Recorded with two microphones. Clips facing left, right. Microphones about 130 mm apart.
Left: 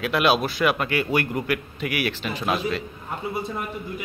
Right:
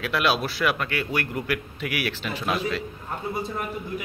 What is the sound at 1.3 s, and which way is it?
Speech, centre (ahead or behind).